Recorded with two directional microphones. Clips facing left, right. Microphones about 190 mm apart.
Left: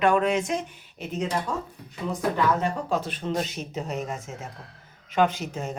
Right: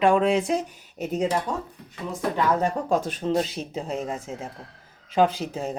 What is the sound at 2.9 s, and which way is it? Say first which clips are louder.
Speech: right 4 dB; 45° right (ahead or behind).